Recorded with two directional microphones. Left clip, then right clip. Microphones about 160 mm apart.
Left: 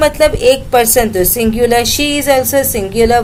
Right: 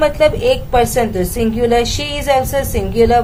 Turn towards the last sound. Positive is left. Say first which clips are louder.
# left 1 dB
turn(degrees=30)  # may be behind; listen again after turning